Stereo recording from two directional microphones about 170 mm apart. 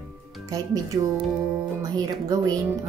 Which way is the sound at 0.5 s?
20° right (ahead or behind).